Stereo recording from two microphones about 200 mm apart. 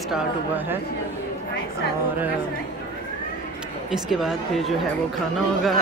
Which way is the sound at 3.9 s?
Centre (ahead or behind).